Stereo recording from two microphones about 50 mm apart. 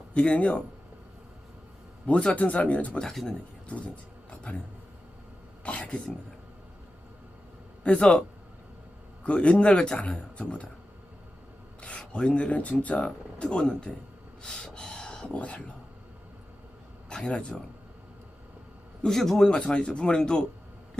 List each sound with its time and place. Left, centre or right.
0.1 s speech: left
2.0 s speech: left
3.0 s speech: centre
4.3 s a sound: left
5.6 s speech: left
7.9 s speech: centre
9.2 s speech: left
11.8 s speech: left
14.4 s a sound: centre
15.3 s speech: left
17.1 s speech: centre
19.0 s speech: centre
19.5 s speech: left